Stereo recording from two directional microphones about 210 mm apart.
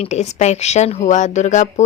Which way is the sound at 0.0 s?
30° left (ahead or behind).